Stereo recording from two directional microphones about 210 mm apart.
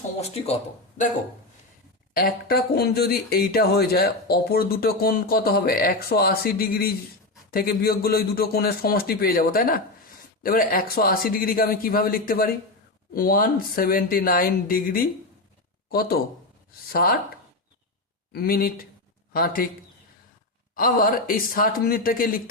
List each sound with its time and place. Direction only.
0.2 s speech: 30° left (ahead or behind)
2.1 s speech: 45° left (ahead or behind)
18.3 s speech: 45° left (ahead or behind)
20.7 s speech: 45° left (ahead or behind)